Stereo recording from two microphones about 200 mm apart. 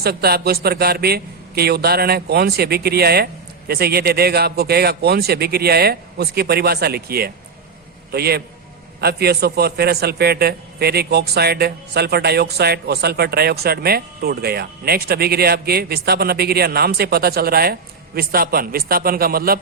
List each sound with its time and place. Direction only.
0.0 s a man's voice: 50° right (ahead or behind)